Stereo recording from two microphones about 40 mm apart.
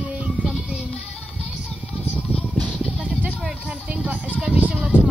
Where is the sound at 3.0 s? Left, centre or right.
Right.